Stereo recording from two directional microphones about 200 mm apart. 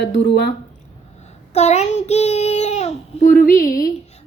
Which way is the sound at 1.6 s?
35° left (ahead or behind).